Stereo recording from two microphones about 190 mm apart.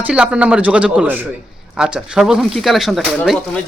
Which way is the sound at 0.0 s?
5° right (ahead or behind).